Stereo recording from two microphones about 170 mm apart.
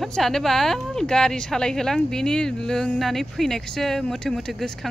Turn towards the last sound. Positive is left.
turn(degrees=0)  # may be behind; listen again after turning